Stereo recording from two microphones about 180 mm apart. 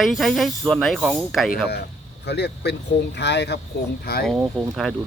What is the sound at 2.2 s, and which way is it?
Speech, 70° left (ahead or behind).